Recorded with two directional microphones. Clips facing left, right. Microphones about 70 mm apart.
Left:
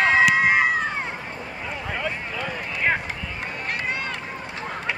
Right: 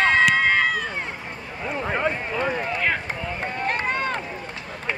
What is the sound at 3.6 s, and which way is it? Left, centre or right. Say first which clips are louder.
Run: right 4 dB; right.